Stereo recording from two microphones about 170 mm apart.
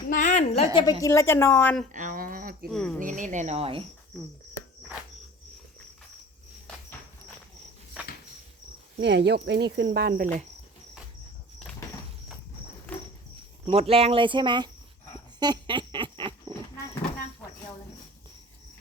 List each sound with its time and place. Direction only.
0.1 s a woman's voice: 45° left (ahead or behind); by 0.9 s 30° left (ahead or behind)
1.0 s a woman's voice: 15° left (ahead or behind)
1.9 s a sound: 50° right (ahead or behind)
2.7 s speech: 5° left (ahead or behind)
3.0 s speech: 50° right (ahead or behind); by 3.8 s 35° right (ahead or behind)
8.0 s a sound: 5° right (ahead or behind)
9.0 s speech: 90° right; by 10.2 s 75° right (ahead or behind)
10.2 s speech: 50° right (ahead or behind)
13.7 s speech: 35° right (ahead or behind)
15.4 s a sound: 25° right (ahead or behind)